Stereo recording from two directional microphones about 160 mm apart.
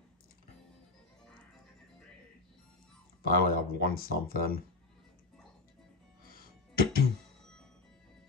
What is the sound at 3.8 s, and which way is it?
Speech, 70° left (ahead or behind).